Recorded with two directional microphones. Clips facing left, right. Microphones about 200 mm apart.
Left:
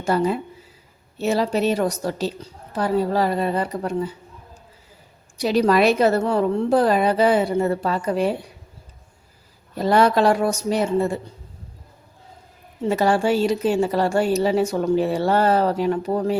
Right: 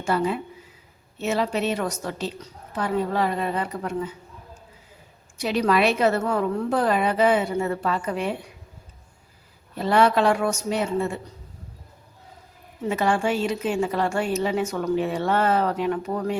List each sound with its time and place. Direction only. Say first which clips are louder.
0.0 s a woman's voice: left 3 dB; 40° left (ahead or behind)
5.4 s a woman's voice: left 4 dB; 35° left (ahead or behind)
9.7 s a woman's voice: left 2 dB; 40° left (ahead or behind)
12.9 s a woman's voice: left 4 dB; 35° left (ahead or behind)